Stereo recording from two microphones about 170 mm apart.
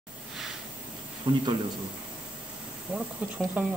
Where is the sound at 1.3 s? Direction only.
30° right (ahead or behind).